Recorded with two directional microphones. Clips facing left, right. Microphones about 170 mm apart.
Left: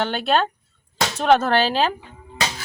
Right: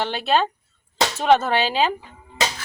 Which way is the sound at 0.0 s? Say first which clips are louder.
Left 1 dB; centre (ahead or behind).